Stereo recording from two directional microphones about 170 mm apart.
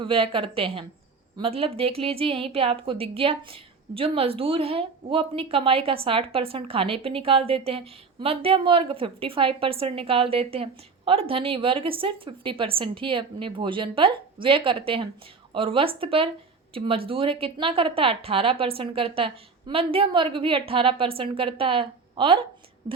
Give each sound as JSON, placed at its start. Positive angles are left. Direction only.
{"t": 0.0, "sound": "speech", "side_deg": -30}